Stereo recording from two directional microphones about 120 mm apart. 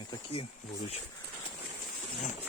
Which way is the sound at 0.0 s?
45° left (ahead or behind).